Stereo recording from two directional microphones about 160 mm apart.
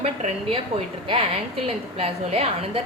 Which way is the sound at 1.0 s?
35° right (ahead or behind).